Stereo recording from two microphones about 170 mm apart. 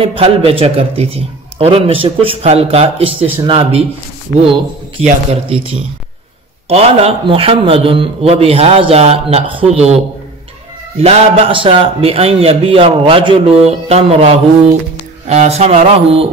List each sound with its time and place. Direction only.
0.0 s a man's voice: 35° right (ahead or behind)
5.0 s a man's voice: 35° right (ahead or behind)
11.0 s a man's voice: 35° right (ahead or behind)